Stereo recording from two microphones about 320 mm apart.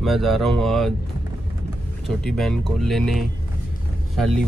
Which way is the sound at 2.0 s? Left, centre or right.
Centre.